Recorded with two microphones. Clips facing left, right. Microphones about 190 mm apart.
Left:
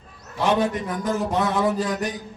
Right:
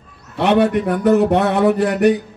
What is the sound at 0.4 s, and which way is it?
A man's voice, 65° right (ahead or behind).